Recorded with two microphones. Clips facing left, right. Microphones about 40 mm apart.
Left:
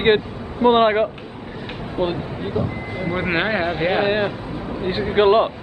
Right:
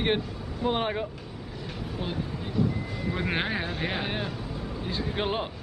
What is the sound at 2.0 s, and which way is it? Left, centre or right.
A man's voice, left.